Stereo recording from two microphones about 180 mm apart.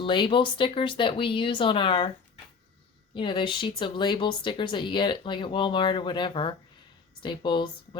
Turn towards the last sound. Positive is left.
turn(degrees=25)  # may be behind; listen again after turning